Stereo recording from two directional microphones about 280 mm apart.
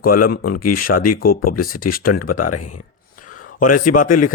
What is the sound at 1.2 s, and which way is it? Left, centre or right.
Speech, left.